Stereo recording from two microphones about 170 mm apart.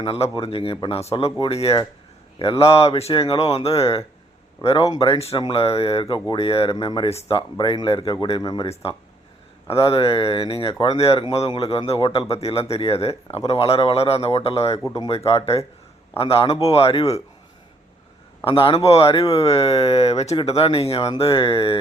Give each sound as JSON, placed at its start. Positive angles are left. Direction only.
{"t": 0.0, "sound": "speech", "side_deg": 30}
{"t": 4.9, "sound": "speech", "side_deg": 25}
{"t": 7.5, "sound": "speech", "side_deg": 25}
{"t": 18.4, "sound": "speech", "side_deg": 30}